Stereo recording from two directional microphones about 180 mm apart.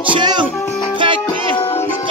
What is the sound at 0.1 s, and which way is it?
Speech, 25° right (ahead or behind).